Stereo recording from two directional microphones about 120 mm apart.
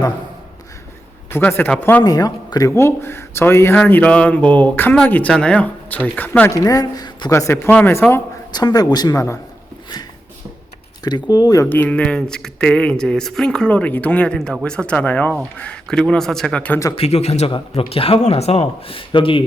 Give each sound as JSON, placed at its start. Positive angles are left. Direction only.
{"t": 1.3, "sound": "speech", "side_deg": 20}
{"t": 2.0, "sound": "speech", "side_deg": 30}
{"t": 6.5, "sound": "speech", "side_deg": 30}
{"t": 8.5, "sound": "speech", "side_deg": 35}
{"t": 11.0, "sound": "speech", "side_deg": 35}
{"t": 11.6, "sound": "speech", "side_deg": 15}
{"t": 16.9, "sound": "speech", "side_deg": 60}
{"t": 17.5, "sound": "speech", "side_deg": 50}